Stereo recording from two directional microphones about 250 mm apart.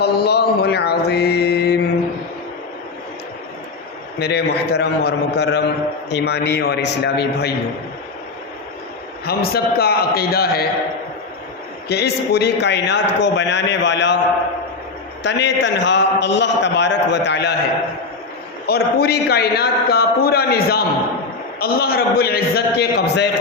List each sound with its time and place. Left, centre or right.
0.0 s mantra: left
4.2 s a man's voice: left
9.2 s a man's voice: left
11.9 s a man's voice: left
15.2 s a man's voice: left
18.7 s a man's voice: left